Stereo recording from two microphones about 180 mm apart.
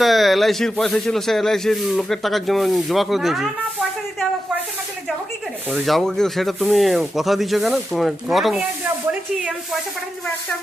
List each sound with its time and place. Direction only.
0.0 s speech: centre (ahead or behind)
5.7 s speech: centre (ahead or behind)